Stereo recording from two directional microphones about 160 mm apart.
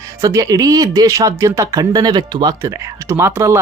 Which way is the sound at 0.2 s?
20° right (ahead or behind).